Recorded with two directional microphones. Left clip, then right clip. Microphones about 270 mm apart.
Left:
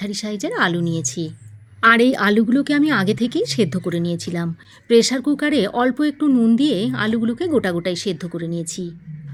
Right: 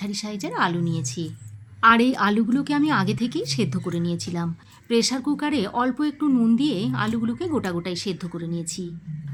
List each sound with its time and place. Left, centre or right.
0.0 s a woman's voice: centre